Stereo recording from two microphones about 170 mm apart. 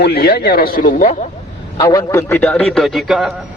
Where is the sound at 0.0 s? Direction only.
65° left (ahead or behind).